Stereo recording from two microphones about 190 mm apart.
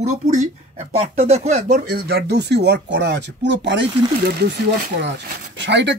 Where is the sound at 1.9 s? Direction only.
60° right (ahead or behind).